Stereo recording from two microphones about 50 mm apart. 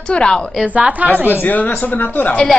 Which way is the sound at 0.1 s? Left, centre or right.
Centre.